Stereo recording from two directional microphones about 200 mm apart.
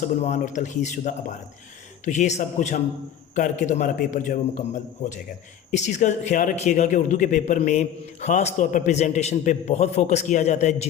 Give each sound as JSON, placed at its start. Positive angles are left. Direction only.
{"t": 0.0, "sound": "a man's voice", "side_deg": 35}